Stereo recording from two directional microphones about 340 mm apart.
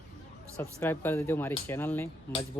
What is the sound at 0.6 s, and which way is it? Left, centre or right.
Speech, centre.